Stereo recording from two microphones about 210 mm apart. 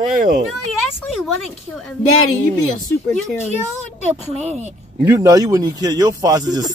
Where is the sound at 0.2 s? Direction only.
45° right (ahead or behind).